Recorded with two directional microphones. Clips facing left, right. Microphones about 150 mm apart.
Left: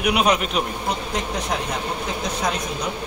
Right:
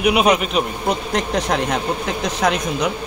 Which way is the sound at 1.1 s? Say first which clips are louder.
Right 5 dB; 75° right (ahead or behind).